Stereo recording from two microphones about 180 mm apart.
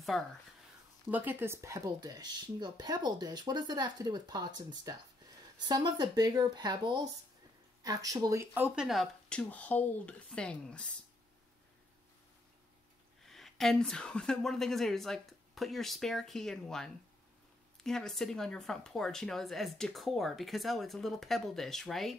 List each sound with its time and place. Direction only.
0.1 s speech: centre (ahead or behind)
8.7 s speech: centre (ahead or behind)
13.2 s speech: centre (ahead or behind)